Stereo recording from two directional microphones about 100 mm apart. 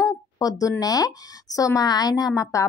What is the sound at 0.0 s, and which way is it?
A woman's voice, 35° left (ahead or behind).